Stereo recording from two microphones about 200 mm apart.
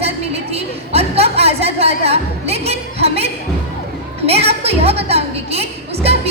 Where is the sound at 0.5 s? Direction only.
30° right (ahead or behind).